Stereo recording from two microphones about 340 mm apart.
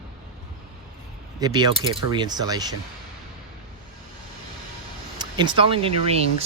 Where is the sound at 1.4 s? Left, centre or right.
Centre.